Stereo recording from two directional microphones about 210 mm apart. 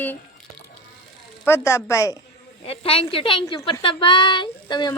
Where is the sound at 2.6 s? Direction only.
25° left (ahead or behind).